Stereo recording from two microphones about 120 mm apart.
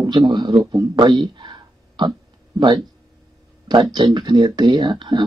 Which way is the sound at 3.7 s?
40° right (ahead or behind).